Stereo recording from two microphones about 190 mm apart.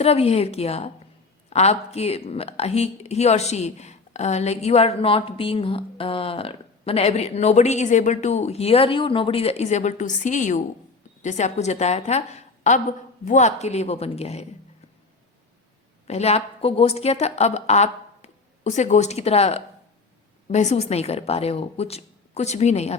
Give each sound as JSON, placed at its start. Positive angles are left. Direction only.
{"t": 0.0, "sound": "speech", "side_deg": 30}
{"t": 16.0, "sound": "speech", "side_deg": 35}